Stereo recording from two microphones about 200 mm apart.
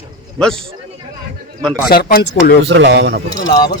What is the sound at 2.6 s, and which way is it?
Speech, 60° right (ahead or behind).